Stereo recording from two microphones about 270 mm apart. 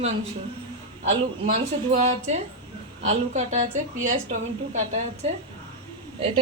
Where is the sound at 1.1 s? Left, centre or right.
Right.